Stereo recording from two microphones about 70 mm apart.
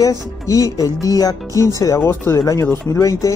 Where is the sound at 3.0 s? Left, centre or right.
Left.